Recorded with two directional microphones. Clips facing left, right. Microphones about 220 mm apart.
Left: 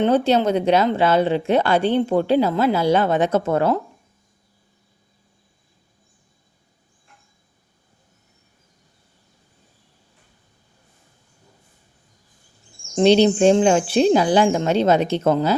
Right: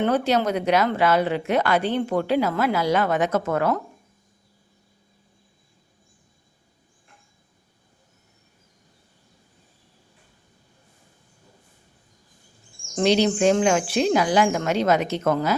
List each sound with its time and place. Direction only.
0.0 s speech: 25° left (ahead or behind)
13.0 s speech: 30° left (ahead or behind)